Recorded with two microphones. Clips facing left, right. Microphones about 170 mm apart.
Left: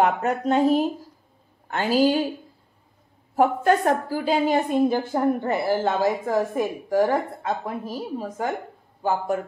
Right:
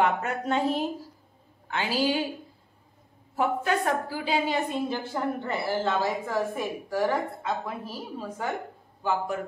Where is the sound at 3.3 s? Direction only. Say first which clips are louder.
Left 7 dB; 45° left (ahead or behind).